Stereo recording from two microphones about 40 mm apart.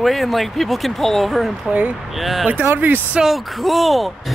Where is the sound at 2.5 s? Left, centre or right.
Right.